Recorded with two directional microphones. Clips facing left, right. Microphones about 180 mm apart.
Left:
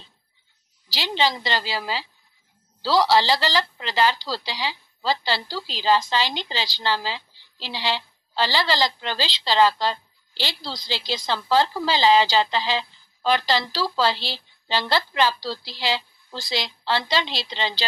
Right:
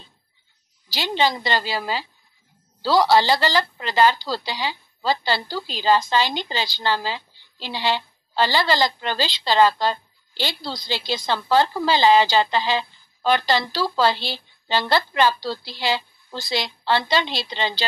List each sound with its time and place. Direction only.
0.8 s a woman's voice: 50° right (ahead or behind)